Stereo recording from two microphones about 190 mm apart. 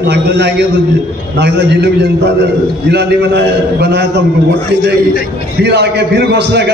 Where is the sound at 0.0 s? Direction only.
60° right (ahead or behind).